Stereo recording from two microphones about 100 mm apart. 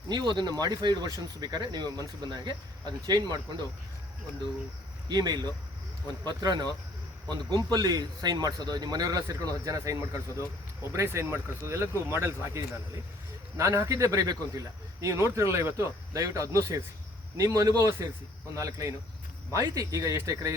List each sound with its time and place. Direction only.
0.1 s speech: 45° right (ahead or behind)
5.0 s a man's voice: 45° right (ahead or behind)